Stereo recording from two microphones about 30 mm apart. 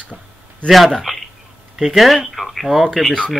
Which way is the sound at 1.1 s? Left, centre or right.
Centre.